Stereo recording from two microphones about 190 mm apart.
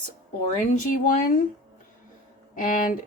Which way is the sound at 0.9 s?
45° left (ahead or behind).